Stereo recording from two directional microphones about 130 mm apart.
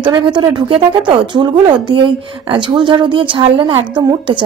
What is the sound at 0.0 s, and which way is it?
Speech, 35° right (ahead or behind).